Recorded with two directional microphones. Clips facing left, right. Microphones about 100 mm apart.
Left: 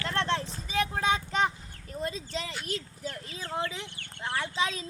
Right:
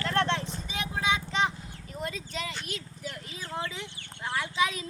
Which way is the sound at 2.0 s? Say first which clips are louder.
Left 1 dB; 30° left (ahead or behind).